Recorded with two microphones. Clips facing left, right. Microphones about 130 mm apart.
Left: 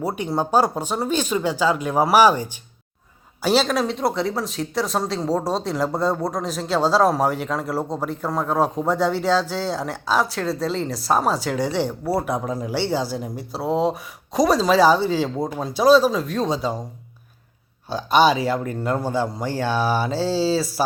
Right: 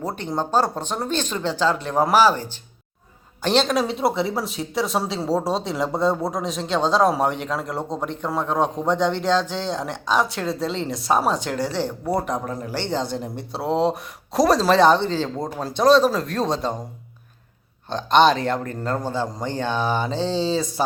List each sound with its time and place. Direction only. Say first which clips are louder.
0.0 s a man's voice: left 2 dB; 10° left (ahead or behind)
17.8 s a man's voice: right 1 dB; 5° left (ahead or behind)